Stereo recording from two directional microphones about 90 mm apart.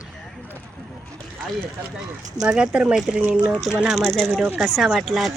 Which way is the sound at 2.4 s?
5° right (ahead or behind).